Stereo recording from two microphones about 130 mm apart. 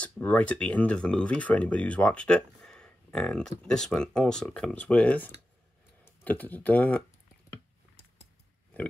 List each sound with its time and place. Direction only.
0.0 s speech: 10° left (ahead or behind)